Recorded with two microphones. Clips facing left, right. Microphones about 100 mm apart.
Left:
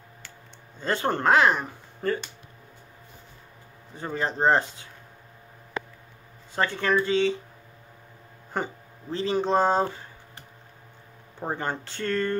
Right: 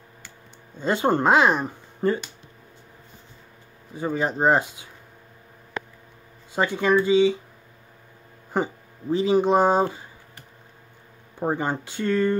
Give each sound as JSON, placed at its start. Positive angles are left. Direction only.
{"t": 0.7, "sound": "speech", "side_deg": -15}
{"t": 3.9, "sound": "speech", "side_deg": -10}
{"t": 6.5, "sound": "speech", "side_deg": -15}
{"t": 8.5, "sound": "speech", "side_deg": -10}
{"t": 11.3, "sound": "speech", "side_deg": -15}